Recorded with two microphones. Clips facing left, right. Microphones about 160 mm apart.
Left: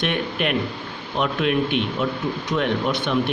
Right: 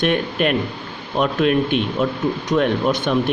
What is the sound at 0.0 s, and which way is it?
Speech, 40° right (ahead or behind).